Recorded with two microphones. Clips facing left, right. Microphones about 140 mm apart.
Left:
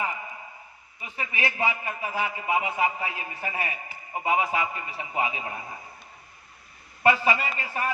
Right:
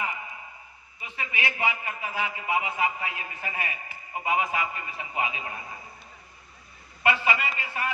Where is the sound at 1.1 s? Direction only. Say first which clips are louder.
Left 2 dB; 35° left (ahead or behind).